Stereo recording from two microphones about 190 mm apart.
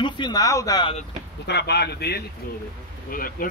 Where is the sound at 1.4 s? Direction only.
60° left (ahead or behind).